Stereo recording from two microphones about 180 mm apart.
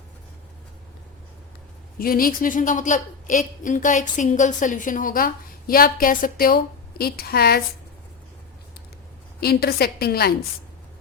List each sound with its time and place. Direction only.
2.0 s a woman's voice: 55° left (ahead or behind)
9.4 s a woman's voice: 60° left (ahead or behind)